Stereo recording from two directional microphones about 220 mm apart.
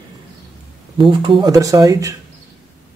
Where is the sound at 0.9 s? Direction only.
20° right (ahead or behind).